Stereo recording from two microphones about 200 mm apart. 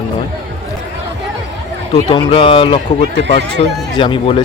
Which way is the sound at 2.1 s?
25° left (ahead or behind).